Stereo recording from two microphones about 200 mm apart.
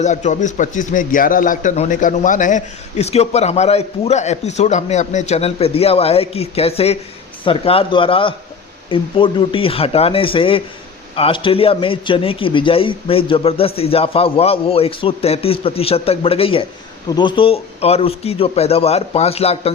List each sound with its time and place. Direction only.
0.0 s a man's voice: 35° left (ahead or behind)